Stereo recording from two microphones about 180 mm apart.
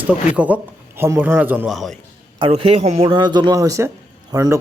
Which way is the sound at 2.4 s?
35° right (ahead or behind).